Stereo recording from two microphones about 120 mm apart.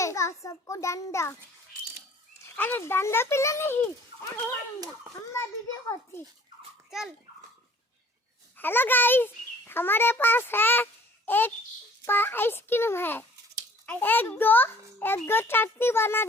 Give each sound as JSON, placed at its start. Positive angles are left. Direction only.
{"t": 0.0, "sound": "a child's voice", "side_deg": 25}
{"t": 2.6, "sound": "a child's voice", "side_deg": 15}
{"t": 8.5, "sound": "a child's voice", "side_deg": 15}